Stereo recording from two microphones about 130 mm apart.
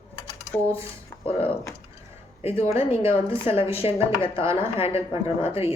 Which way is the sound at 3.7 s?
50° left (ahead or behind).